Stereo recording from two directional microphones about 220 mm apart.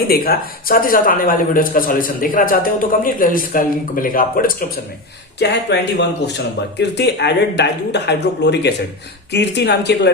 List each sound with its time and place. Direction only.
0.1 s speech: 40° left (ahead or behind)
5.4 s speech: 50° left (ahead or behind)